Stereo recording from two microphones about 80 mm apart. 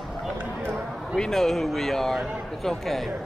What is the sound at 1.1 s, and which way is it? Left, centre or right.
Speech, centre.